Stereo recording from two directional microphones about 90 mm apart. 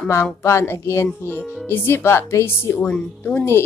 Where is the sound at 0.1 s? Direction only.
35° left (ahead or behind); by 3.4 s 15° left (ahead or behind).